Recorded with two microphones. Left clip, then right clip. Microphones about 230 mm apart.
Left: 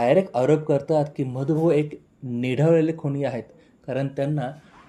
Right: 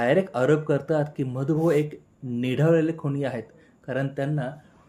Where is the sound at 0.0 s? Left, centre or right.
Centre.